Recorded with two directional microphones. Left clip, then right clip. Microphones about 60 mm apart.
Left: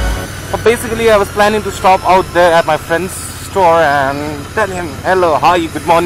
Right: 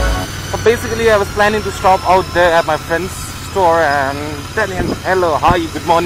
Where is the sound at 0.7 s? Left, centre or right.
Left.